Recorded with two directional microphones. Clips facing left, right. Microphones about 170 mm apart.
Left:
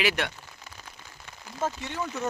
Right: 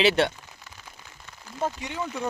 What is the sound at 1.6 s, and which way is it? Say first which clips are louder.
Speech: right 1 dB; 15° right (ahead or behind).